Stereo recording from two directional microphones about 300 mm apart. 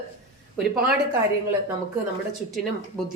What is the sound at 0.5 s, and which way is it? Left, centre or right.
Speech, centre.